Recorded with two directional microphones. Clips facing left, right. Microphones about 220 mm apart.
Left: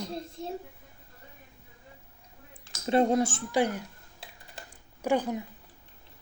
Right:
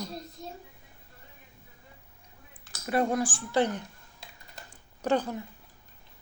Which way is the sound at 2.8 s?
25° left (ahead or behind).